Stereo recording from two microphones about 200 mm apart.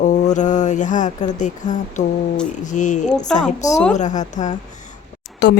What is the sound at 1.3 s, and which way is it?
A woman's voice, 35° left (ahead or behind).